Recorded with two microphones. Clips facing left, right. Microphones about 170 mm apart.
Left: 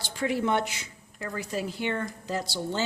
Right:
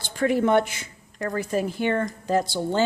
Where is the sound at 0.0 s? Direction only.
50° right (ahead or behind).